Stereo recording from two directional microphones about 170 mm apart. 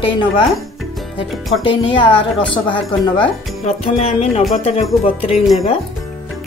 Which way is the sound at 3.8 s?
35° left (ahead or behind).